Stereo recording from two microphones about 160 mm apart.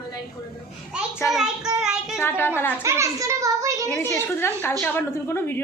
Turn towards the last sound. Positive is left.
turn(degrees=15)  # may be behind; listen again after turning